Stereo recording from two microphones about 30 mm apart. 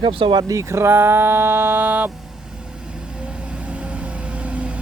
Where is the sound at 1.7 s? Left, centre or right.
Right.